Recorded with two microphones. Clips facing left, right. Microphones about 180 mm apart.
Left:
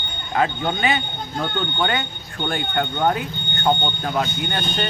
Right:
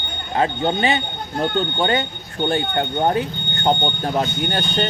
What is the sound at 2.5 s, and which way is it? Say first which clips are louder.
Speech: right 2 dB; 30° right (ahead or behind).